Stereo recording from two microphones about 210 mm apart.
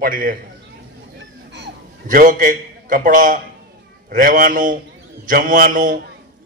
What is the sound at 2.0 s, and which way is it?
A man's voice, 40° right (ahead or behind).